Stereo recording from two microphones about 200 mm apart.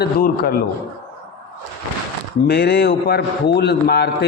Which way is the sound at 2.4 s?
55° left (ahead or behind).